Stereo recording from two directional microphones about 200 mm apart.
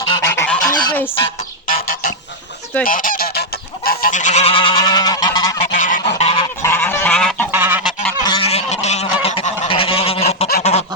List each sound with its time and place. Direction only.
0.0 s goose: 20° left (ahead or behind)
2.8 s goose: 45° left (ahead or behind); by 5.5 s 20° left (ahead or behind)
5.5 s goose: 40° left (ahead or behind)
6.6 s goose: 10° left (ahead or behind)
7.5 s goose: 10° right (ahead or behind)
8.2 s goose: 25° left (ahead or behind)